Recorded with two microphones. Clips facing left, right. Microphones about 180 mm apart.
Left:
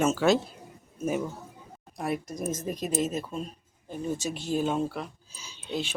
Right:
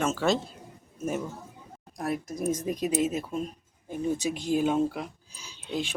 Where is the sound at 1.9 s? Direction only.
Centre (ahead or behind); by 5.1 s 15° right (ahead or behind).